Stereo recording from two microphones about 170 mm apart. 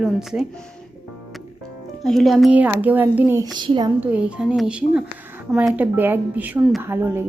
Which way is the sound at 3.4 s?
25° right (ahead or behind).